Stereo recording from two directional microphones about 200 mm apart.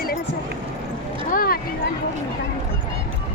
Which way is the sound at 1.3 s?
45° left (ahead or behind).